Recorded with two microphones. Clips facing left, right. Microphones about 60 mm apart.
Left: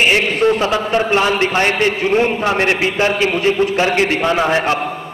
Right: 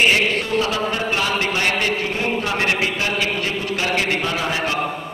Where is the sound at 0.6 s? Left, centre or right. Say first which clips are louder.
Left 5 dB; left.